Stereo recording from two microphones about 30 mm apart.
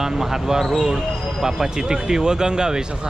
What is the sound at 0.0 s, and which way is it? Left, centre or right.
Speech, centre.